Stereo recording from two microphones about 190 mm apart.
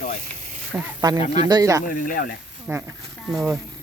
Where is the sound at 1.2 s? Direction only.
35° left (ahead or behind).